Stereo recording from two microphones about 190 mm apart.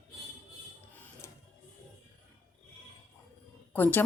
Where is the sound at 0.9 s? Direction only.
10° left (ahead or behind).